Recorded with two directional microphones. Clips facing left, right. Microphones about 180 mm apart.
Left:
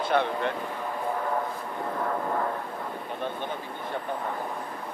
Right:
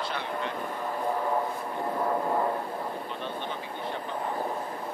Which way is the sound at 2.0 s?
15° right (ahead or behind).